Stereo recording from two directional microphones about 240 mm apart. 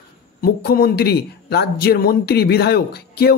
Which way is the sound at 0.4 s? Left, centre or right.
Left.